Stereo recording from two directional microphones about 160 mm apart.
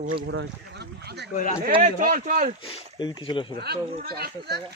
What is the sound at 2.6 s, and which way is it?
Speech, 35° left (ahead or behind).